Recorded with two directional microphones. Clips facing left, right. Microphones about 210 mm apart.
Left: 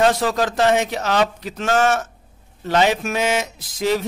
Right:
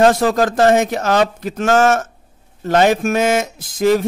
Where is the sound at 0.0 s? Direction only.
45° right (ahead or behind).